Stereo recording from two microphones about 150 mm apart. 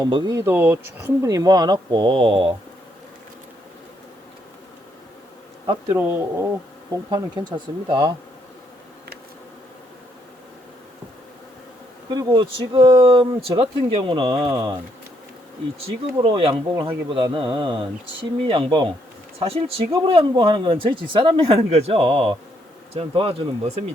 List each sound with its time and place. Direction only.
0.0 s speech: 30° right (ahead or behind)
5.9 s speech: 15° right (ahead or behind)
7.1 s speech: 30° right (ahead or behind)
12.1 s speech: 30° right (ahead or behind)
16.2 s speech: 35° right (ahead or behind)